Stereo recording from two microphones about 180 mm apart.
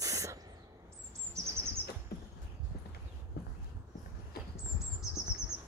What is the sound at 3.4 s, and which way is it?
Horse, 65° left (ahead or behind).